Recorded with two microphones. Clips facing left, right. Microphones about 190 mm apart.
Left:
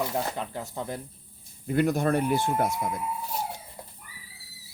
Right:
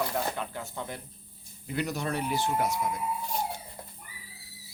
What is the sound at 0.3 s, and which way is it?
Speech, 35° left (ahead or behind).